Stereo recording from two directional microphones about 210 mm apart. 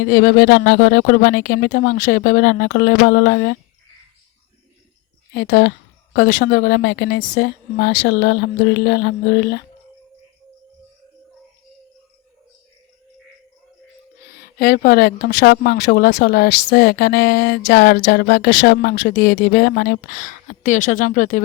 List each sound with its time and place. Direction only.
0.0 s speech: 45° left (ahead or behind)
5.3 s speech: 50° left (ahead or behind)
14.3 s speech: 50° left (ahead or behind)
19.8 s speech: 40° left (ahead or behind)